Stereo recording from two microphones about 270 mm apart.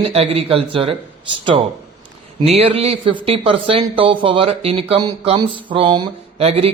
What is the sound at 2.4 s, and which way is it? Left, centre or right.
Speech, right.